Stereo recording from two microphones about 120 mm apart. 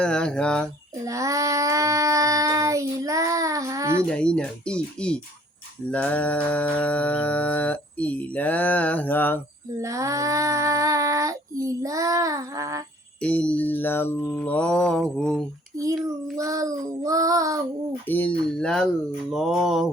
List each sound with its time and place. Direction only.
0.0 s mantra: 5° left (ahead or behind)
1.0 s child singing: 25° right (ahead or behind)
4.1 s mantra: 10° left (ahead or behind)
9.8 s child singing: 25° right (ahead or behind)
13.1 s mantra: 10° left (ahead or behind)
15.7 s a sound: 30° right (ahead or behind)
16.4 s child singing: 30° right (ahead or behind)
18.0 s mantra: 15° left (ahead or behind)